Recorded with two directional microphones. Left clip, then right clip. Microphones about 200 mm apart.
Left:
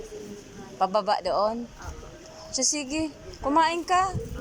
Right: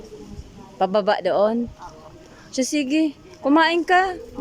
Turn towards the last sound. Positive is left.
turn(degrees=-40)  # may be behind; listen again after turning